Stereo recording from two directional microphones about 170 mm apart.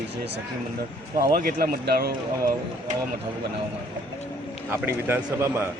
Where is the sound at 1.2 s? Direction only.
60° right (ahead or behind).